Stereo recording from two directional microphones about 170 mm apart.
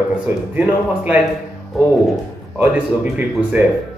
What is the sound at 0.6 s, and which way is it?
Speech, 10° right (ahead or behind).